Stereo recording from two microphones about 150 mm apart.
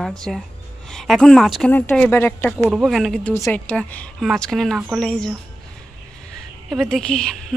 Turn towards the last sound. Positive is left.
turn(degrees=5)  # may be behind; listen again after turning